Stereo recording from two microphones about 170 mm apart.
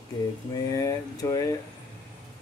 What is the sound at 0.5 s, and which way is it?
Speech, 20° left (ahead or behind).